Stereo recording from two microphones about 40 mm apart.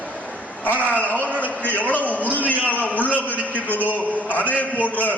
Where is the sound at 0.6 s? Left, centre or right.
Left.